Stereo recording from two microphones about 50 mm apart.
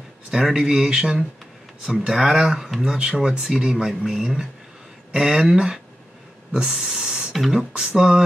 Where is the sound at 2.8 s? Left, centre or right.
Centre.